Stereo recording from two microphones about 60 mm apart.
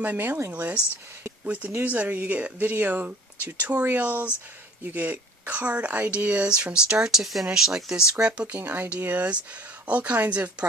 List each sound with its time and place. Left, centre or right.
0.0 s speech: right